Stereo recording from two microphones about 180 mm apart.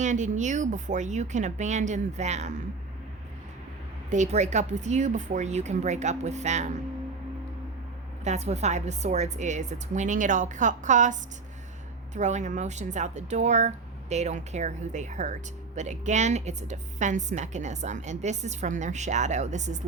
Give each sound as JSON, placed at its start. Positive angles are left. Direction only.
{"t": 0.0, "sound": "speech", "side_deg": -40}
{"t": 4.1, "sound": "speech", "side_deg": -40}
{"t": 8.2, "sound": "speech", "side_deg": -40}